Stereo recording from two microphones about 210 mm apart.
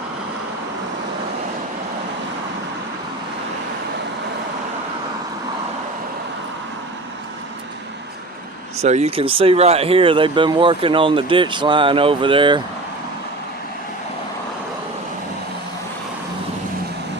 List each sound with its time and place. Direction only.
8.8 s speech: 30° right (ahead or behind)